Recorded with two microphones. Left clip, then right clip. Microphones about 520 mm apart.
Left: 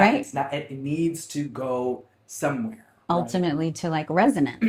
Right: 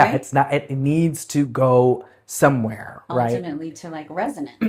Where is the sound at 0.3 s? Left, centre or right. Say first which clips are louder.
Right 9 dB; right.